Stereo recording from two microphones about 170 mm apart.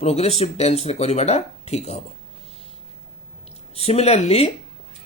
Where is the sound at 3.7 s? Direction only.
35° left (ahead or behind).